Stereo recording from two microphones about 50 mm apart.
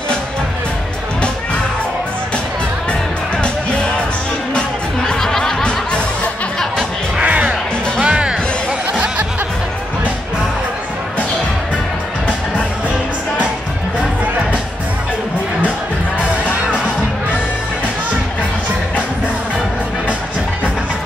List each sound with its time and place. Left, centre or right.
2.9 s music: left
7.2 s music: right